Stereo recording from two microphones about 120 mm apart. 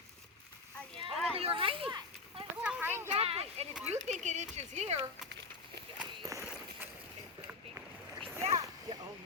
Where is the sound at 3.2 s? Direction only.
60° right (ahead or behind).